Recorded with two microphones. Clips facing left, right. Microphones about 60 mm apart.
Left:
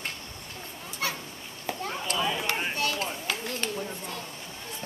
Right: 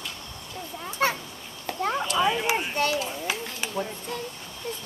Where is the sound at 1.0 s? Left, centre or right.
Right.